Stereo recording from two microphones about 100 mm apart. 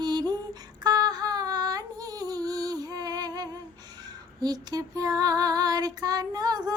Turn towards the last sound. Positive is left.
turn(degrees=-40)  # may be behind; listen again after turning